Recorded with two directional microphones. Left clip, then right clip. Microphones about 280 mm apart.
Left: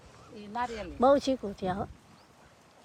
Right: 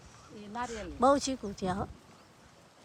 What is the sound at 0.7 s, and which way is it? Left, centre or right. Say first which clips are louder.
Speech: left 2 dB; centre.